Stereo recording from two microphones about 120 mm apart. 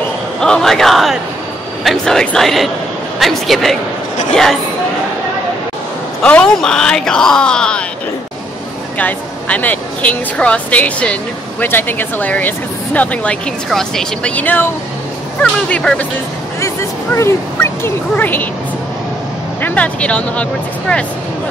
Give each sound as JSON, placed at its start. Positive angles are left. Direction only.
{"t": 0.4, "sound": "speech", "side_deg": 5}
{"t": 6.2, "sound": "speech", "side_deg": 10}
{"t": 8.9, "sound": "speech", "side_deg": 15}
{"t": 16.6, "sound": "speech", "side_deg": 25}
{"t": 19.6, "sound": "speech", "side_deg": 10}